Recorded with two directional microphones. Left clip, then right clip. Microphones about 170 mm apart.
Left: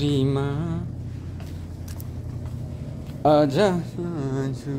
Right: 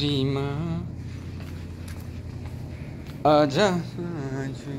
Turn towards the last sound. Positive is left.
turn(degrees=35)  # may be behind; listen again after turning